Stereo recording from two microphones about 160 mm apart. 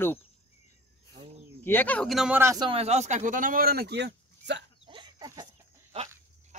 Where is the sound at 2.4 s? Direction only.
20° right (ahead or behind).